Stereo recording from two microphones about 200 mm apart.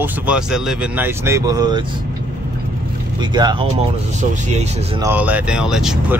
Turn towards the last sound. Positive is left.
turn(degrees=0)  # may be behind; listen again after turning